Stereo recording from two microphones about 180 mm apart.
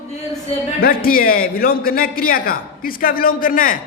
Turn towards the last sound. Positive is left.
turn(degrees=50)  # may be behind; listen again after turning